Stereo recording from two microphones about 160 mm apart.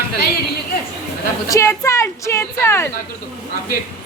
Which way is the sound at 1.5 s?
20° left (ahead or behind).